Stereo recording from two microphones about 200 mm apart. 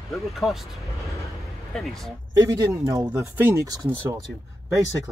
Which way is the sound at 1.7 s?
Centre (ahead or behind).